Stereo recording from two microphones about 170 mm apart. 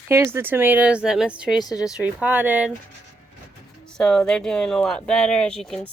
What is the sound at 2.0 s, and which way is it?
Speech, 10° right (ahead or behind).